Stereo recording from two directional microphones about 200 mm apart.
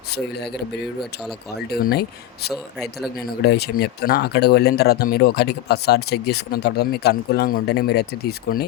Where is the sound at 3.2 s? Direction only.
50° left (ahead or behind).